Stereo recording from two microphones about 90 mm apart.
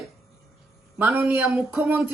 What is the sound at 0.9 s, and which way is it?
A woman's voice, 20° right (ahead or behind).